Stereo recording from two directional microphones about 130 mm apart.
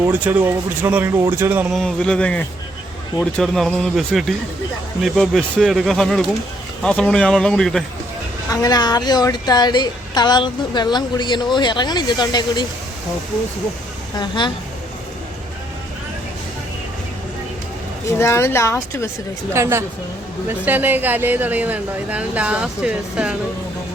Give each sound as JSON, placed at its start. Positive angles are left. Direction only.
{"t": 0.0, "sound": "speech", "side_deg": -15}
{"t": 1.7, "sound": "speech", "side_deg": 5}
{"t": 8.4, "sound": "a woman's voice", "side_deg": 30}
{"t": 14.2, "sound": "a woman's voice", "side_deg": 35}
{"t": 18.2, "sound": "a woman's voice", "side_deg": 20}
{"t": 19.6, "sound": "a woman's voice", "side_deg": -20}